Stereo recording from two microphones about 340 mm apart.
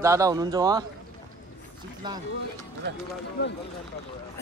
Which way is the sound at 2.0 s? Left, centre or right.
Centre.